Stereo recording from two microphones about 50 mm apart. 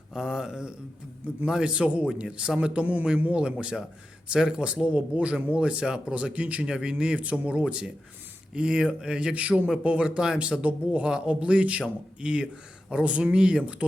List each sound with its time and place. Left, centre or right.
0.1 s a man's voice: centre; by 3.4 s right
3.4 s a man's voice: centre